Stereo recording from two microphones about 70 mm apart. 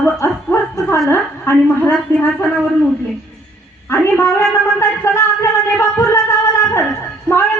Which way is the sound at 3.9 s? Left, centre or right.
Left.